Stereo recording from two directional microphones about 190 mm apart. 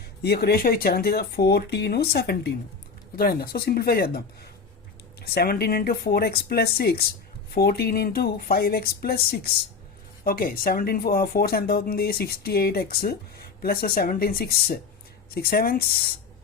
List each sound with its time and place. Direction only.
0.0 s speech: 60° left (ahead or behind)
5.2 s speech: 55° left (ahead or behind)